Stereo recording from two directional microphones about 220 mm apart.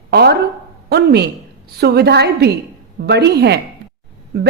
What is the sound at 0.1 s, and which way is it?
A woman's voice, 45° right (ahead or behind).